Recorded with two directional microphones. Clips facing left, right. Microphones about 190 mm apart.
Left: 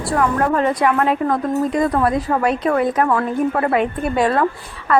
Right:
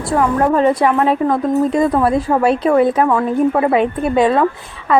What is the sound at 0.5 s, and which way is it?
A woman's voice, 25° right (ahead or behind).